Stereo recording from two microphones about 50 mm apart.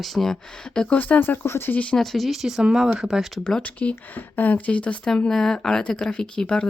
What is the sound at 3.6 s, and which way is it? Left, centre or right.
Speech, left.